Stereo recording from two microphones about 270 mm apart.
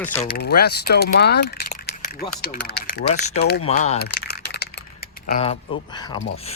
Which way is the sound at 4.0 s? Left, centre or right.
Left.